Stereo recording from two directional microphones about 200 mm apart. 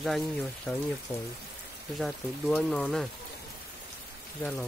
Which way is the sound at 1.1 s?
15° left (ahead or behind).